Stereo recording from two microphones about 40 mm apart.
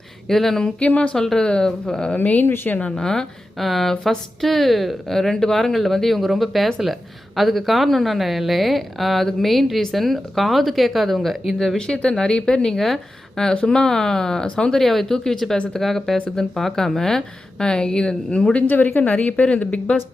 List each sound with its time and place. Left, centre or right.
0.3 s speech: centre
0.9 s speech: left
1.1 s speech: centre
2.1 s speech: left
2.9 s speech: centre
3.6 s a woman's voice: centre
5.1 s a woman's voice: centre
11.8 s speech: centre
13.5 s speech: left
14.8 s speech: centre
18.5 s speech: left
19.0 s speech: left